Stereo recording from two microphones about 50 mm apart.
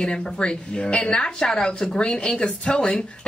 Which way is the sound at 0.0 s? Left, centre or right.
Centre.